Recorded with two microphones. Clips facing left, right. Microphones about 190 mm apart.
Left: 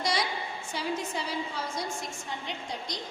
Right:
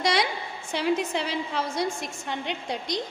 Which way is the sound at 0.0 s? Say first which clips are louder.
Right 5 dB; 80° right.